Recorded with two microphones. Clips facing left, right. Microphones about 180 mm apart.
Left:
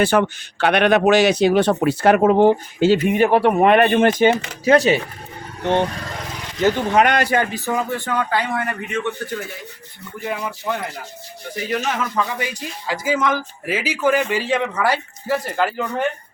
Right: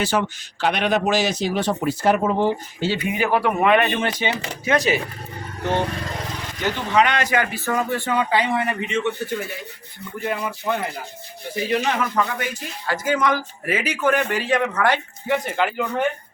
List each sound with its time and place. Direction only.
0.0 s speech: 60° left (ahead or behind)
3.2 s speech: 30° left (ahead or behind); by 4.4 s 50° left (ahead or behind)
4.6 s speech: 35° left (ahead or behind)
6.6 s speech: 50° left (ahead or behind)
7.3 s speech: 30° left (ahead or behind)
7.6 s speech: 10° left (ahead or behind)
7.9 s a man's voice: 5° right (ahead or behind)
10.2 s speech: centre (ahead or behind)